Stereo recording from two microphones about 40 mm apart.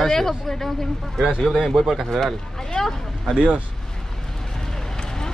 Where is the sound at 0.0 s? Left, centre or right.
Centre.